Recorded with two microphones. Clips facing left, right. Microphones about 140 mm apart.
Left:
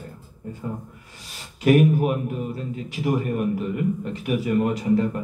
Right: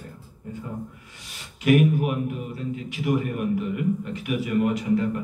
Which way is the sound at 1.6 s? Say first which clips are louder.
Left 2 dB; 35° left (ahead or behind).